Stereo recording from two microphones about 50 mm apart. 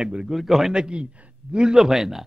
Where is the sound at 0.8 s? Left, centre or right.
Centre.